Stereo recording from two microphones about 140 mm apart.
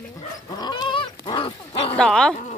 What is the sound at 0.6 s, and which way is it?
Goat, 30° left (ahead or behind).